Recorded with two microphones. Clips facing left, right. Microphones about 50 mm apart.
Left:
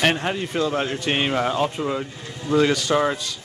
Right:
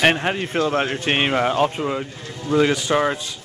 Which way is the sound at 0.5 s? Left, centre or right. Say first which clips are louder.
Right 3 dB; right.